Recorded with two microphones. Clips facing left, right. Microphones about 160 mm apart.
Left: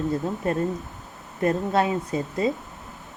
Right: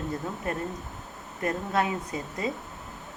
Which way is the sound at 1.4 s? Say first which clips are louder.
Left 5 dB; 30° left (ahead or behind).